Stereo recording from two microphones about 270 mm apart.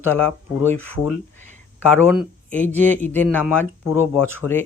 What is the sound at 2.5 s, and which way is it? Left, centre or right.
Speech, centre.